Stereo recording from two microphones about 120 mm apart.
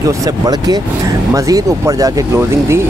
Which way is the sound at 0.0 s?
35° right (ahead or behind).